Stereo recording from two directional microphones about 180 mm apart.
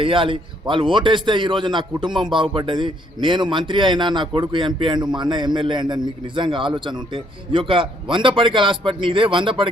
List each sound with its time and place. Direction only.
0.0 s a man's voice: 30° right (ahead or behind)